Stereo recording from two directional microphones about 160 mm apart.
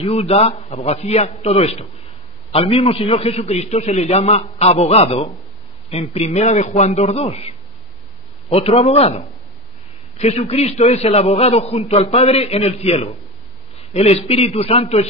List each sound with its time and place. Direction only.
0.0 s a man's voice: 40° left (ahead or behind)